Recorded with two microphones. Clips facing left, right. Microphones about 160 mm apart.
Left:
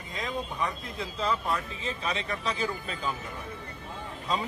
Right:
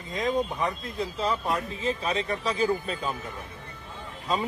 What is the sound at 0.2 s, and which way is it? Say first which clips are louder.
Speech: right 6 dB; 40° right (ahead or behind).